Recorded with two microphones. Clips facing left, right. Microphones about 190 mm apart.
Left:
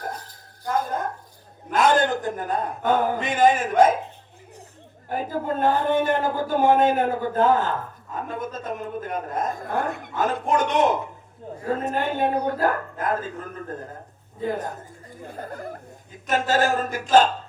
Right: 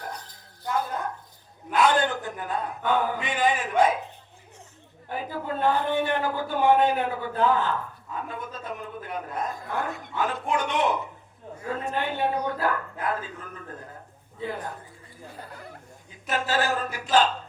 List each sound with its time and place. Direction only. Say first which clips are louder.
0.7 s a sound: left 3 dB; 45° left (ahead or behind)
1.7 s a man's voice: left 3 dB; 45° left (ahead or behind)
5.0 s a man's voice: left 5 dB; 45° left (ahead or behind)